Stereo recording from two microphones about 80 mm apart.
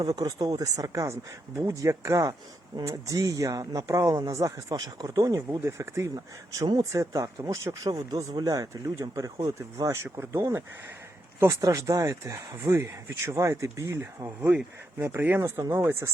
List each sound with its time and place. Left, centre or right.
0.0 s speech: right
5.5 s speech: right
11.6 s speech: right